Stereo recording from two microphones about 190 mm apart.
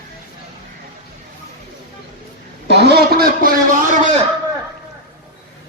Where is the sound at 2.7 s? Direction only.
60° right (ahead or behind).